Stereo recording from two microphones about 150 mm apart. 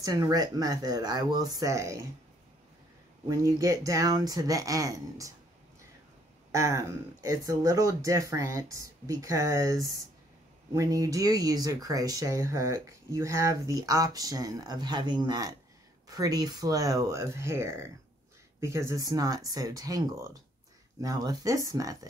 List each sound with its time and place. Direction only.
0.0 s speech: 25° right (ahead or behind)
3.3 s speech: 20° right (ahead or behind)
6.5 s speech: 20° right (ahead or behind)